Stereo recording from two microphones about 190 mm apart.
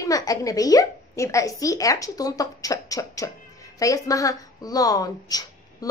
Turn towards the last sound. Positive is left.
turn(degrees=20)  # may be behind; listen again after turning